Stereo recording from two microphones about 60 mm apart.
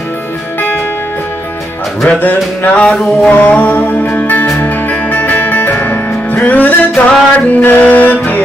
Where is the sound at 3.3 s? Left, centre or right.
Left.